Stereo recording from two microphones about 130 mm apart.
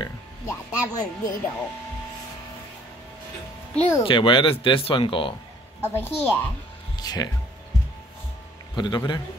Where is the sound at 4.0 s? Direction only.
40° left (ahead or behind).